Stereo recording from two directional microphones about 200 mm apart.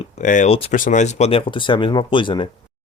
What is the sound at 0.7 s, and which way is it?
Speech, 40° left (ahead or behind).